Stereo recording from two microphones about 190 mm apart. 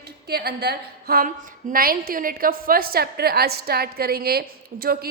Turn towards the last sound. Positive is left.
turn(degrees=-55)  # may be behind; listen again after turning